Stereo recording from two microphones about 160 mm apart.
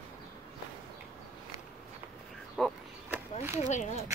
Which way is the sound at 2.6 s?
10° left (ahead or behind).